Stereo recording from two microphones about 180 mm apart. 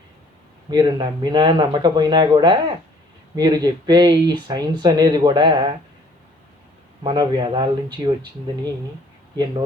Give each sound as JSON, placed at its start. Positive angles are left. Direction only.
{"t": 0.7, "sound": "speech", "side_deg": -25}
{"t": 7.0, "sound": "speech", "side_deg": -25}